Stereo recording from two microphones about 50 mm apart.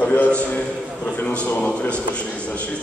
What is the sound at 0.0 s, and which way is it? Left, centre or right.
A man's voice, left.